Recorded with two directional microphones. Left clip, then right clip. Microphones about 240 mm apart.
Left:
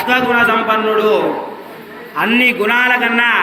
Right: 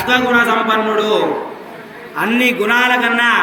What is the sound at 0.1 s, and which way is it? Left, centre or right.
A man's voice, right.